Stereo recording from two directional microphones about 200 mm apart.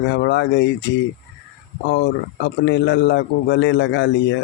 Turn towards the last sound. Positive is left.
turn(degrees=60)  # may be behind; listen again after turning